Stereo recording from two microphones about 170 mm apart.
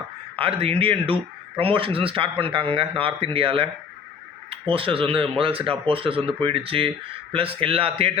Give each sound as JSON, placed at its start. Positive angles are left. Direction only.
{"t": 0.3, "sound": "speech", "side_deg": -35}